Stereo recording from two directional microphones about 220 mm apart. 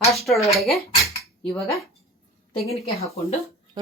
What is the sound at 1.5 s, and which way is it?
Speech, 15° left (ahead or behind).